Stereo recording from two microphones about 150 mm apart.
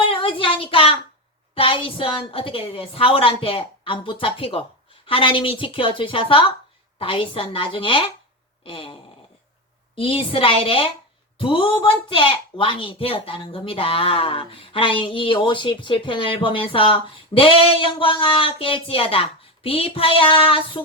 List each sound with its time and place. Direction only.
0.1 s child singing: 35° left (ahead or behind)
1.5 s speech: 35° left (ahead or behind)